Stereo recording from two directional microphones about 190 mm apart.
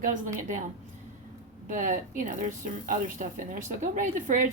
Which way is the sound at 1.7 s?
45° right (ahead or behind).